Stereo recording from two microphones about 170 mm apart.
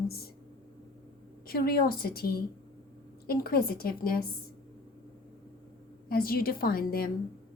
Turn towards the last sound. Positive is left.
turn(degrees=60)  # may be behind; listen again after turning